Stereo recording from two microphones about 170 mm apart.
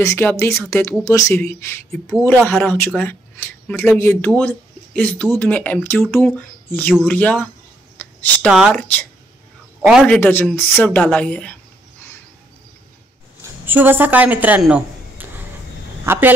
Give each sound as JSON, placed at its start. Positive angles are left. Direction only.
{"t": 0.0, "sound": "speech", "side_deg": 15}
{"t": 1.9, "sound": "a woman's voice", "side_deg": 0}
{"t": 8.0, "sound": "a sound", "side_deg": 10}
{"t": 8.5, "sound": "a woman's voice", "side_deg": -5}
{"t": 13.4, "sound": "a sound", "side_deg": -10}
{"t": 16.1, "sound": "a man's voice", "side_deg": -10}